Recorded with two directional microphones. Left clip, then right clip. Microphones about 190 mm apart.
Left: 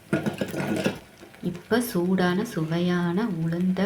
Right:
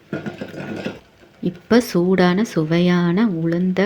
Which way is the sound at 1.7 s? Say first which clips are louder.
Right 8 dB; 45° right (ahead or behind).